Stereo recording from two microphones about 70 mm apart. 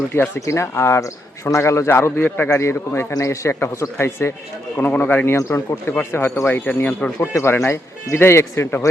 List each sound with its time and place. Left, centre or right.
0.3 s speech: left
2.5 s speech: left
3.1 s a man's voice: left
3.5 s speech: left
4.8 s speech: left
5.4 s speech: left
5.9 s speech: left
7.0 s speech: left
7.3 s speech: left